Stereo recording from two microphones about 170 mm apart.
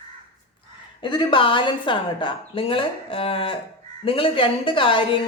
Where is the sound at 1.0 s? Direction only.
30° left (ahead or behind).